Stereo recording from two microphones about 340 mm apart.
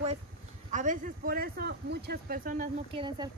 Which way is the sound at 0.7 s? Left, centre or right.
Right.